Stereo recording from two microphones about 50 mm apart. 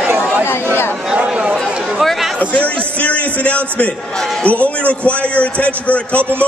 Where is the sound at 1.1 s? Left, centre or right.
Right.